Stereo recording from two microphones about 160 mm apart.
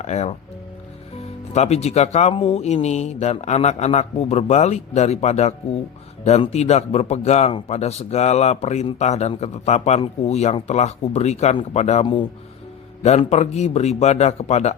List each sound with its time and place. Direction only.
0.0 s a man's voice: 45° left (ahead or behind)